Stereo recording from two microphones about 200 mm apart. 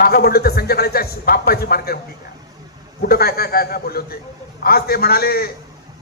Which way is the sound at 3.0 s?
50° left (ahead or behind).